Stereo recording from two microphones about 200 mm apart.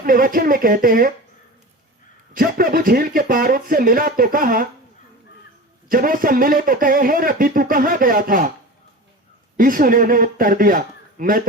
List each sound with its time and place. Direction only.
0.0 s speech: 45° right (ahead or behind)
2.3 s speech: 45° right (ahead or behind)
5.9 s speech: 45° right (ahead or behind)
9.6 s speech: 45° right (ahead or behind)